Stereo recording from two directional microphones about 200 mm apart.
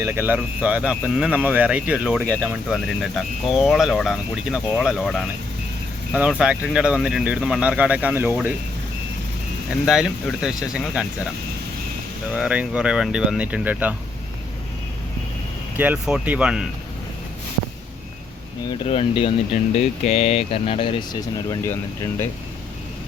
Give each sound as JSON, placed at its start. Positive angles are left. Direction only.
{"t": 0.0, "sound": "speech", "side_deg": -10}
{"t": 9.8, "sound": "speech", "side_deg": 0}
{"t": 12.3, "sound": "speech", "side_deg": -5}
{"t": 15.8, "sound": "speech", "side_deg": -5}
{"t": 18.9, "sound": "speech", "side_deg": 30}